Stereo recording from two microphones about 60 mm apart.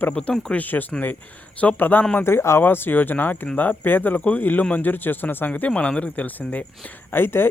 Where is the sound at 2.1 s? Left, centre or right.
Left.